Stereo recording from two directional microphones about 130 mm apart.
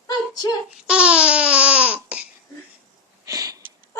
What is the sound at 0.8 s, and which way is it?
Babbling, 10° right (ahead or behind).